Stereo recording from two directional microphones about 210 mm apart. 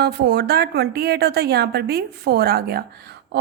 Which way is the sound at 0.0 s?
50° right (ahead or behind).